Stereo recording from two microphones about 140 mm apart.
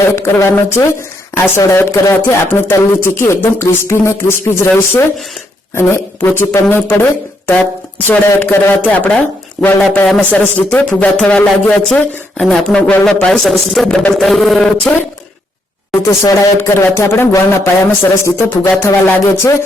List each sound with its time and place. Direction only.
0.2 s a man's voice: 20° left (ahead or behind); by 14.9 s centre (ahead or behind)
16.0 s speech: 20° left (ahead or behind)